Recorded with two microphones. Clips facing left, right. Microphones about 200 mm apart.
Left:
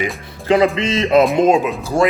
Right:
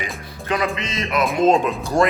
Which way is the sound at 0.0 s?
25° left (ahead or behind).